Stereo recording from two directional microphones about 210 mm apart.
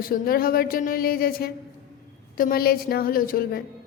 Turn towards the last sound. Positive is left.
turn(degrees=45)  # may be behind; listen again after turning